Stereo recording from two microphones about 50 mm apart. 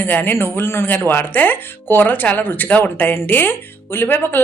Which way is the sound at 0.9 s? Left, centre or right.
Left.